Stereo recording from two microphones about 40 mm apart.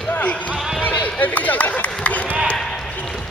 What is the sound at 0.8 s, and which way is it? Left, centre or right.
Run, left.